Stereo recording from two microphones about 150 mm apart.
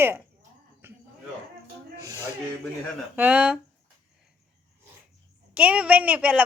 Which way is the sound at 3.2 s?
10° right (ahead or behind).